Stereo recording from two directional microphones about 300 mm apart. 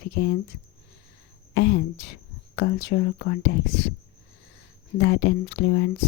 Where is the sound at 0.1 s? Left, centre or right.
Left.